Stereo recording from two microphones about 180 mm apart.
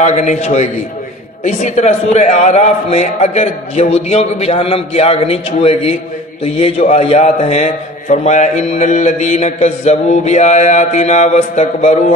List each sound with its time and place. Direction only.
0.0 s a man's voice: 40° left (ahead or behind)